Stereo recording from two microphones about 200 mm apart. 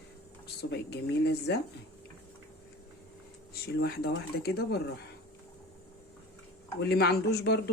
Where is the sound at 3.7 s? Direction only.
55° left (ahead or behind).